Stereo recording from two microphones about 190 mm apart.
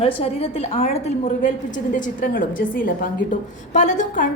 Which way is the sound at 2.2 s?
45° left (ahead or behind).